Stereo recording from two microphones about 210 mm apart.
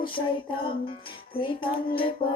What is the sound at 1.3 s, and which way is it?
Music, 25° left (ahead or behind).